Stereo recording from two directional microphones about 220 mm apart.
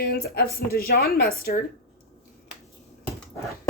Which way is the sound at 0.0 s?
45° left (ahead or behind).